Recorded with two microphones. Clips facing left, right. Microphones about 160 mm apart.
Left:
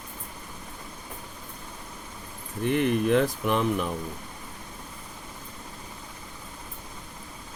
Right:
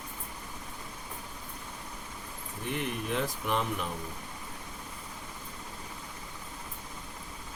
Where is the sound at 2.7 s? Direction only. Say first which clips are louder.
Left 11 dB; 75° left (ahead or behind).